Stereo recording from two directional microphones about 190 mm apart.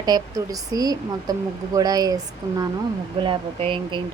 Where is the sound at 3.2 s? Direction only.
25° right (ahead or behind).